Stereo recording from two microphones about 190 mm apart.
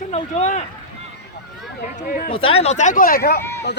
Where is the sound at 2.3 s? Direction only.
30° left (ahead or behind); by 3.4 s 55° left (ahead or behind).